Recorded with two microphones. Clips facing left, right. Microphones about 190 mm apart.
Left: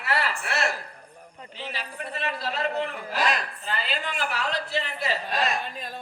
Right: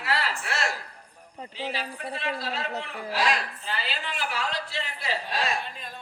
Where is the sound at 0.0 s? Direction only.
60° left (ahead or behind).